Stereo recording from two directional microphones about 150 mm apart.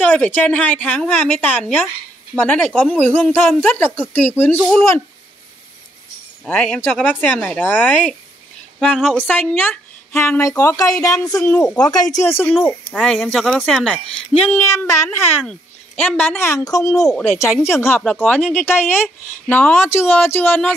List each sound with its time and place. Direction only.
0.0 s speech: 10° left (ahead or behind)
6.4 s speech: 10° left (ahead or behind)
8.7 s speech: 5° right (ahead or behind)
9.1 s speech: 15° left (ahead or behind)
11.8 s speech: 25° left (ahead or behind)
12.3 s speech: 15° left (ahead or behind)
12.5 s speech: centre (ahead or behind)
14.5 s speech: 15° left (ahead or behind)